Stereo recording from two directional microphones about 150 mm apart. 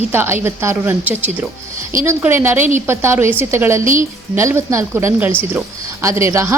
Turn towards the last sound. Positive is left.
turn(degrees=-20)  # may be behind; listen again after turning